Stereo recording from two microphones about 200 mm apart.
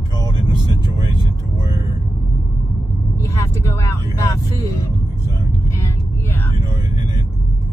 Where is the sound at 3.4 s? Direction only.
15° left (ahead or behind).